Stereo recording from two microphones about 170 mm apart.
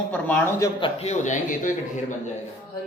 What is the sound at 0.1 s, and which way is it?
Speech, 10° left (ahead or behind).